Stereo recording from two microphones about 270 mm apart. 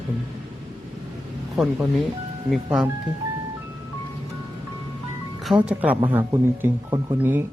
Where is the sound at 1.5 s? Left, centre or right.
Centre.